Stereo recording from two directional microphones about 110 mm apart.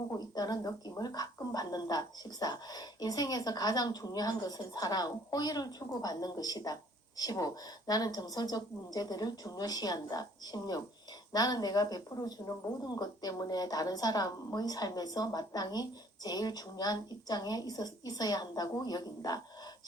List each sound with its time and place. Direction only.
0.1 s a woman's voice: 35° left (ahead or behind)